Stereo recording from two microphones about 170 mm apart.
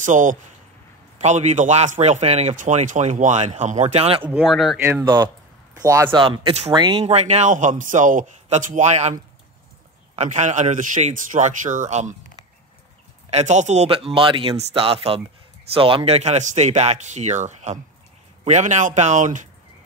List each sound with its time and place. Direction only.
0.0 s a man's voice: 50° right (ahead or behind)
4.4 s speech: centre (ahead or behind)
4.7 s speech: 15° right (ahead or behind)
5.0 s a man's voice: 25° right (ahead or behind); by 12.2 s 45° right (ahead or behind)
13.3 s a man's voice: 40° right (ahead or behind)